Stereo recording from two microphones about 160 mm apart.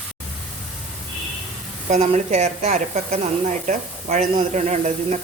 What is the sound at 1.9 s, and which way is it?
Speech, 45° right (ahead or behind).